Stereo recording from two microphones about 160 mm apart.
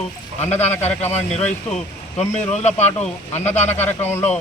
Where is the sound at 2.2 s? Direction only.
45° left (ahead or behind).